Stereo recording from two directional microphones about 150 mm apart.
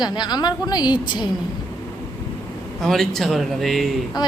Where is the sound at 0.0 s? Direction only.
30° left (ahead or behind).